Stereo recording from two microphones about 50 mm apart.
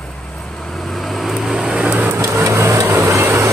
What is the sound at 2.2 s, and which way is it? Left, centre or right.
Vehicle, right.